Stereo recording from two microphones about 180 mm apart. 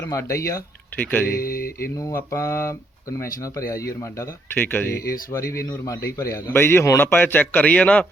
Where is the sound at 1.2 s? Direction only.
55° left (ahead or behind).